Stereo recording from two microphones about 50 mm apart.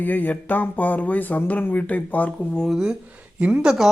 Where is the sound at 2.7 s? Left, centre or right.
Centre.